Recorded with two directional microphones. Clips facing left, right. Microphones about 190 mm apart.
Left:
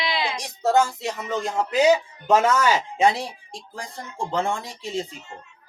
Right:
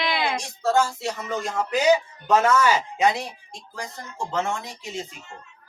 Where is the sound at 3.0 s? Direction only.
30° left (ahead or behind).